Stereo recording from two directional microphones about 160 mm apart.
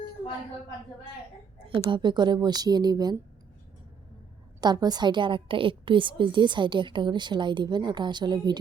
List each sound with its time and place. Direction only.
1.9 s a woman's voice: 30° right (ahead or behind)
4.6 s a woman's voice: 25° right (ahead or behind)